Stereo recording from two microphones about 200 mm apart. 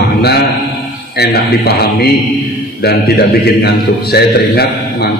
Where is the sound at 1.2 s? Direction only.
55° left (ahead or behind).